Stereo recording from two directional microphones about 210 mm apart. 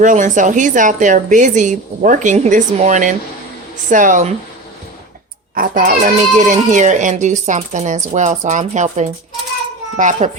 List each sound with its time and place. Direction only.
0.0 s a child's voice: 35° right (ahead or behind)
5.5 s a child's voice: 40° right (ahead or behind)